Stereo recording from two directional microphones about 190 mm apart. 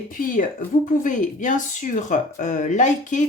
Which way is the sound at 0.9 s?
40° left (ahead or behind).